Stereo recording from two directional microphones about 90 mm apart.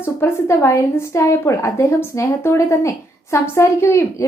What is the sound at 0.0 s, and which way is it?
A woman's voice, 30° left (ahead or behind).